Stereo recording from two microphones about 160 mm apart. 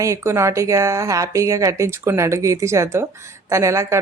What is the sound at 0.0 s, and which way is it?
Speech, 20° right (ahead or behind).